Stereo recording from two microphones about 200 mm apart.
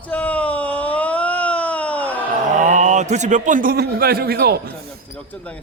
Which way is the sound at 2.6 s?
35° right (ahead or behind).